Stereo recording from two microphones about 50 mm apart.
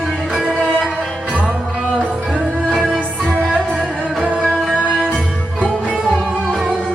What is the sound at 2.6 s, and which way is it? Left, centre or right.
Music, centre.